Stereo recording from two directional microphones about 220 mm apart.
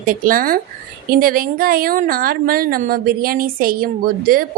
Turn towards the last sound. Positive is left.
turn(degrees=-40)  # may be behind; listen again after turning